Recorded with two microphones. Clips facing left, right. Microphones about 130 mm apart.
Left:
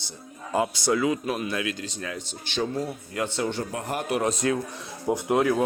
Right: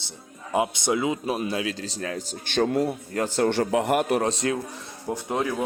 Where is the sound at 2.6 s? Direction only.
65° right (ahead or behind).